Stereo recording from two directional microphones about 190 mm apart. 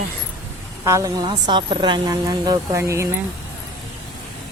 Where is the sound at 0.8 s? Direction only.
15° right (ahead or behind).